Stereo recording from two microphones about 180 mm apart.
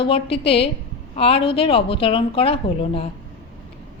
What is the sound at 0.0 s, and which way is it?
Speech, 30° left (ahead or behind).